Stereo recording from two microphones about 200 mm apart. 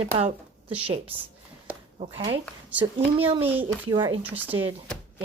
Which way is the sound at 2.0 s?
30° right (ahead or behind).